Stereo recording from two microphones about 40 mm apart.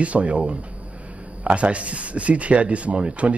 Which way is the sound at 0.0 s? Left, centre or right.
Right.